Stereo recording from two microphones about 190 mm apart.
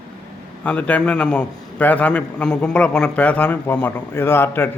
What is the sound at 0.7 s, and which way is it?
A man's voice, 5° left (ahead or behind).